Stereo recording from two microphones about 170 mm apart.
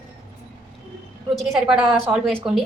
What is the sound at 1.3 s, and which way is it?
A woman's voice, centre (ahead or behind).